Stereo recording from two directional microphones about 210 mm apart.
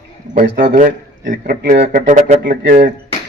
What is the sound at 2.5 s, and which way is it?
Speech, 50° right (ahead or behind).